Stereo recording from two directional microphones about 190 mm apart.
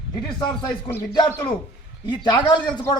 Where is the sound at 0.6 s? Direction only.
15° left (ahead or behind).